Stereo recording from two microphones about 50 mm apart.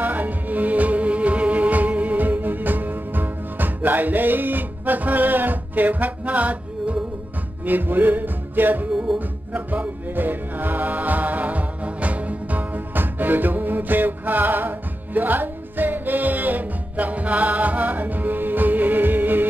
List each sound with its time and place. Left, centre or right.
0.0 s music: right
7.6 s music: right